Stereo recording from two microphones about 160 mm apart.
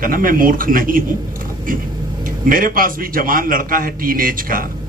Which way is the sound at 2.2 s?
60° right (ahead or behind).